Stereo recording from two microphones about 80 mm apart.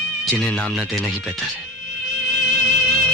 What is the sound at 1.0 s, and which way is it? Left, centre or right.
Speech, centre.